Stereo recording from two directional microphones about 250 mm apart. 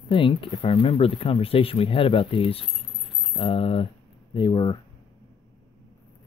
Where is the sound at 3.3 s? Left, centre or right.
Left.